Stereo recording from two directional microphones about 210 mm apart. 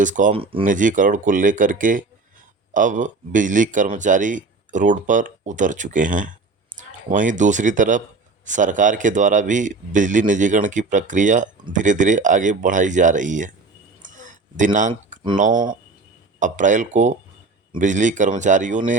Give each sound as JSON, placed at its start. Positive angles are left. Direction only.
{"t": 0.0, "sound": "a man's voice", "side_deg": -35}
{"t": 0.3, "sound": "speech", "side_deg": -25}
{"t": 0.6, "sound": "a man's voice", "side_deg": -40}
{"t": 14.0, "sound": "a sound", "side_deg": -35}
{"t": 15.4, "sound": "a man's voice", "side_deg": -35}